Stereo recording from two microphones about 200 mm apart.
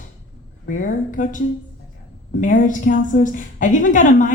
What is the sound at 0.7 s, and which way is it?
Speech, 40° left (ahead or behind).